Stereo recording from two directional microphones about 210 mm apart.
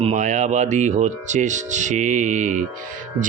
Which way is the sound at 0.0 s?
35° right (ahead or behind).